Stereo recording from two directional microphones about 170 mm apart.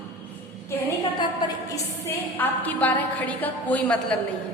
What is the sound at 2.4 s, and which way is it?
A woman's voice, 10° left (ahead or behind).